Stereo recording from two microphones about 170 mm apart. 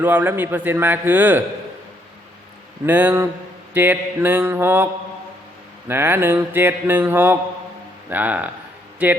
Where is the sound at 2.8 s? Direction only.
10° right (ahead or behind).